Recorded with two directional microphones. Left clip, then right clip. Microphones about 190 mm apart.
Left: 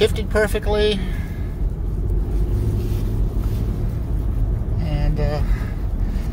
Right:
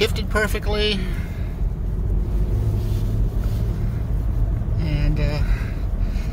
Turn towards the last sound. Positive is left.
turn(degrees=-15)  # may be behind; listen again after turning